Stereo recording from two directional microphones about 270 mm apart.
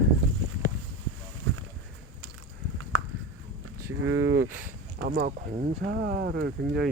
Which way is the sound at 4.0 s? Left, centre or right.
Right.